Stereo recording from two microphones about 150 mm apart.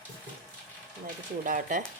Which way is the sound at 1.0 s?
65° right (ahead or behind).